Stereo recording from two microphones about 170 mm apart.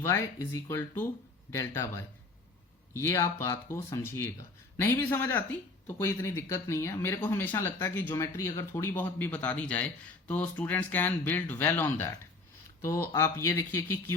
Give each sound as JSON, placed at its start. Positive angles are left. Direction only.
{"t": 0.0, "sound": "speech", "side_deg": 15}
{"t": 2.9, "sound": "speech", "side_deg": 15}